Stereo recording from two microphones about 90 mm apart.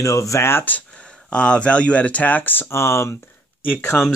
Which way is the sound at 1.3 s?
10° left (ahead or behind).